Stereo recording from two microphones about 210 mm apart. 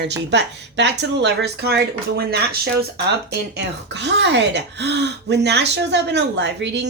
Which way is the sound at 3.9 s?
55° right (ahead or behind).